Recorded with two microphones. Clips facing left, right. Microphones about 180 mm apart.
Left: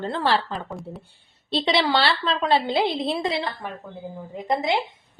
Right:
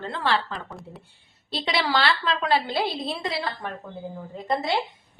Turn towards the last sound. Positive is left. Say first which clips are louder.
# left 2 dB
turn(degrees=15)  # may be behind; listen again after turning